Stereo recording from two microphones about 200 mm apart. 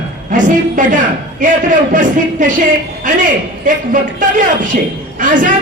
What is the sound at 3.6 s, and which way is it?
Speech, 40° right (ahead or behind).